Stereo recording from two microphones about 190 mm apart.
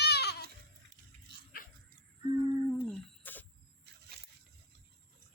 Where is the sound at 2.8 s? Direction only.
10° left (ahead or behind).